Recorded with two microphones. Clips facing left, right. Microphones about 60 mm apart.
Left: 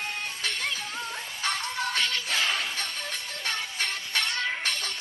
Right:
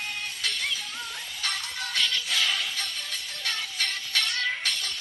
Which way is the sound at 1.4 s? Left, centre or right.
Left.